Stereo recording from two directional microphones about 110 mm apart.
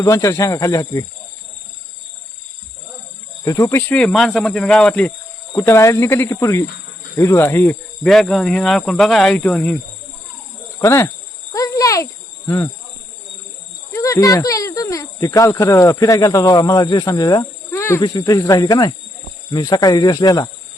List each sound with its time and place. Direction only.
0.0 s speech: 30° left (ahead or behind)
3.4 s speech: 30° left (ahead or behind)
3.9 s speech: 5° left (ahead or behind)
5.5 s speech: 25° left (ahead or behind)
8.0 s speech: 5° left (ahead or behind)
10.8 s speech: 20° left (ahead or behind)
11.5 s insect: 30° left (ahead or behind)
12.5 s speech: 30° left (ahead or behind)
13.9 s speech: 30° left (ahead or behind)
17.7 s wild animals: 25° left (ahead or behind)
18.0 s speech: 35° left (ahead or behind)